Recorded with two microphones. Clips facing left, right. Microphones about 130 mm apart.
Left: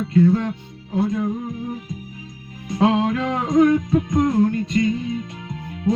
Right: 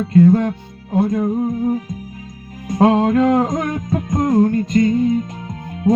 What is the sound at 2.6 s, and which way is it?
Music, 45° right (ahead or behind).